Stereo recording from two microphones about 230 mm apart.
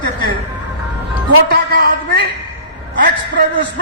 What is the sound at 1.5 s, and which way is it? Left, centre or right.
A man's voice, right.